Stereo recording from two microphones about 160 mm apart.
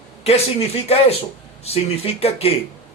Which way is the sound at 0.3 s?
40° left (ahead or behind).